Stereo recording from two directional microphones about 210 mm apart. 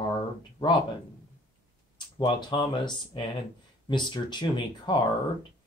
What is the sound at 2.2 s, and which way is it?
Speech, 20° left (ahead or behind).